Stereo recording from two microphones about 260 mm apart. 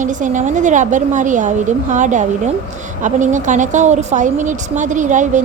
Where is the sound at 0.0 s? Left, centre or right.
Right.